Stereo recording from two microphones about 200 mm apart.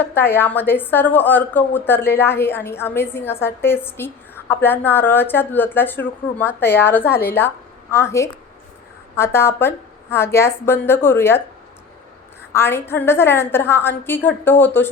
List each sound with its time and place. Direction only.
0.0 s a woman's voice: 10° left (ahead or behind)
7.1 s a woman's voice: 50° left (ahead or behind)
7.3 s a woman's voice: 10° left (ahead or behind)
12.5 s a woman's voice: 10° left (ahead or behind)